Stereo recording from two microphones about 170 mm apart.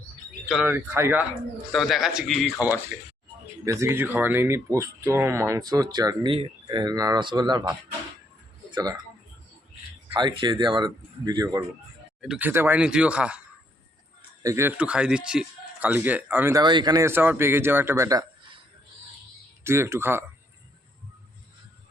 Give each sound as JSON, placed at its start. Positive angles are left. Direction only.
{"t": 0.4, "sound": "speech", "side_deg": 0}
{"t": 0.7, "sound": "speech", "side_deg": -10}
{"t": 1.7, "sound": "a man's voice", "side_deg": 0}
{"t": 3.7, "sound": "speech", "side_deg": -15}
{"t": 10.2, "sound": "speech", "side_deg": -25}
{"t": 12.2, "sound": "speech", "side_deg": -5}
{"t": 14.4, "sound": "speech", "side_deg": -15}
{"t": 19.6, "sound": "speech", "side_deg": -15}